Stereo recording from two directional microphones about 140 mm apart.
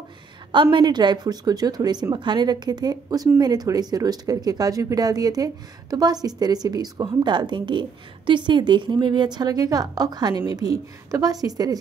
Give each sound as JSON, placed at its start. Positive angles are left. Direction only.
{"t": 0.5, "sound": "a woman's voice", "side_deg": -35}